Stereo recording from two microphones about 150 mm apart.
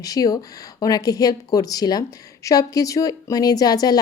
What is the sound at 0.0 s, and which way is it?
A woman's voice, 25° left (ahead or behind).